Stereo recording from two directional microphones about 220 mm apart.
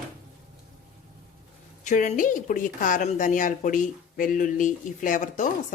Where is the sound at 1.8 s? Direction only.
35° left (ahead or behind).